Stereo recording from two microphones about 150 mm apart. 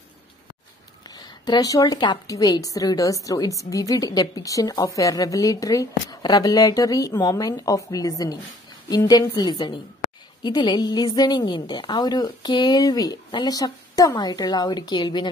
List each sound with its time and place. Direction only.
1.1 s a woman's voice: 25° left (ahead or behind)